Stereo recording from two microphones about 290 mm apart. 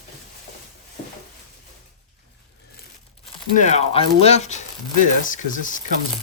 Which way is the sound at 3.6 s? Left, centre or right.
Left.